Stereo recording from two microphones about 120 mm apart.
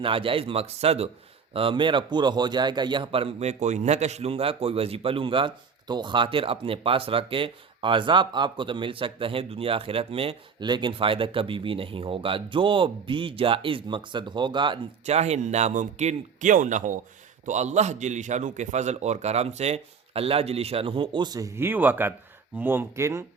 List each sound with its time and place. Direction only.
0.0 s a man's voice: 45° right (ahead or behind)
1.5 s a man's voice: 45° right (ahead or behind)
3.6 s a man's voice: 75° right (ahead or behind); by 10.3 s 50° right (ahead or behind)
10.6 s a man's voice: 40° right (ahead or behind)
15.0 s speech: 65° right (ahead or behind); by 17.0 s 90° right
17.4 s a man's voice: 75° right (ahead or behind); by 23.2 s 25° right (ahead or behind)